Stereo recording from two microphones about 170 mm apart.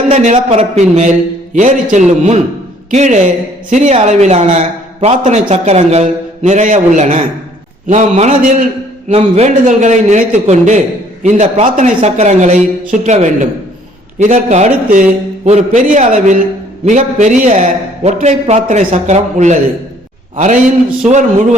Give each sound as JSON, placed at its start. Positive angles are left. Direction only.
{"t": 0.1, "sound": "a man's voice", "side_deg": -45}